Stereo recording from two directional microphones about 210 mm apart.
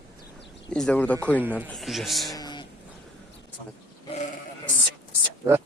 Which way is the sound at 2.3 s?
20° left (ahead or behind).